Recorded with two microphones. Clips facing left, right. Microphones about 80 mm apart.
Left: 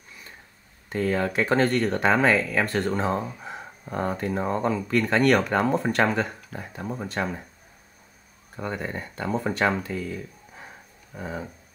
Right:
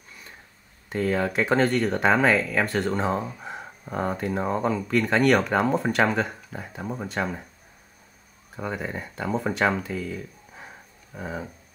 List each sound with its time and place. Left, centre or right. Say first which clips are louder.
0.8 s speech: even; centre
8.5 s speech: even; centre